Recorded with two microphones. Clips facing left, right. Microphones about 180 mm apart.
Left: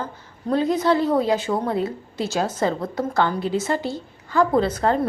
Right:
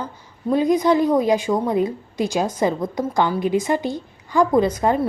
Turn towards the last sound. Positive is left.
turn(degrees=-10)  # may be behind; listen again after turning